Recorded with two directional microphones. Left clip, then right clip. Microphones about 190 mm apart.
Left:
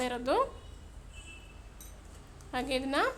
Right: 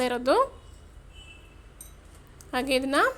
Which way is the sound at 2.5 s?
30° right (ahead or behind).